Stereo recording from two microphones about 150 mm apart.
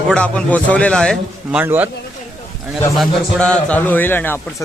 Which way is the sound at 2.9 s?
5° left (ahead or behind).